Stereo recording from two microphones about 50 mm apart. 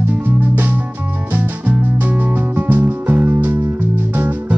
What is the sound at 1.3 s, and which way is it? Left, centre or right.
Music, right.